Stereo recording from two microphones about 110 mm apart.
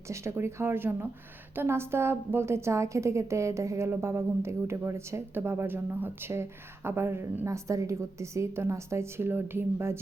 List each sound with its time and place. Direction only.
0.1 s a woman's voice: 25° right (ahead or behind)